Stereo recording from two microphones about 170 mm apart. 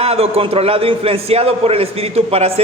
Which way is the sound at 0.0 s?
35° right (ahead or behind).